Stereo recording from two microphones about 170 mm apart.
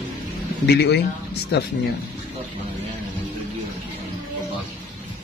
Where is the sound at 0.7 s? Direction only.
75° left (ahead or behind).